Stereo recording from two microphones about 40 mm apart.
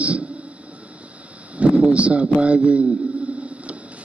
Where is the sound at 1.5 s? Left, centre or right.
Right.